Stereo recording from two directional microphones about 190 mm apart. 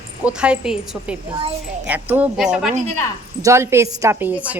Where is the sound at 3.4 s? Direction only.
15° right (ahead or behind).